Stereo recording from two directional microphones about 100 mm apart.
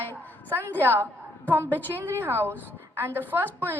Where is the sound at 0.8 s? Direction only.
20° right (ahead or behind).